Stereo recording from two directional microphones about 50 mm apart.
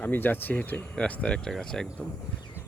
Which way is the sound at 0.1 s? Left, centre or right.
Left.